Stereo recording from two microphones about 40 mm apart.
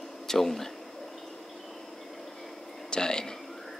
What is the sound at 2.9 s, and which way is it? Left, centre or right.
Speech, centre.